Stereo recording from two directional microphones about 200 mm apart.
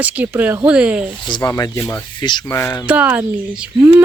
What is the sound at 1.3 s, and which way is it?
Speech, 20° left (ahead or behind).